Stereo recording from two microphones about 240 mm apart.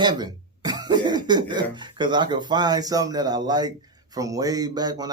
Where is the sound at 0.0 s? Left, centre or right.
Centre.